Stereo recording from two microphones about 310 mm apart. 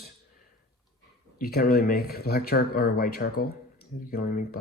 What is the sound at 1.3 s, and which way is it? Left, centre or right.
Speech, left.